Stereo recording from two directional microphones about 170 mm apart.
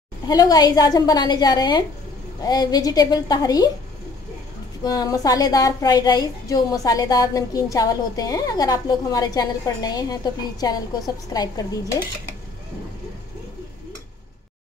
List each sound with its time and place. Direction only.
0.3 s a woman's voice: 20° left (ahead or behind)
4.8 s a woman's voice: 20° left (ahead or behind)